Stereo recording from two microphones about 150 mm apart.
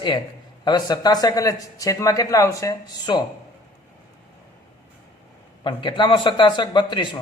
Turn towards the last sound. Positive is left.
turn(degrees=30)  # may be behind; listen again after turning